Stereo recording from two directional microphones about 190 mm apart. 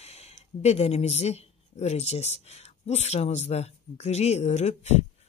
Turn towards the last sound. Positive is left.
turn(degrees=35)  # may be behind; listen again after turning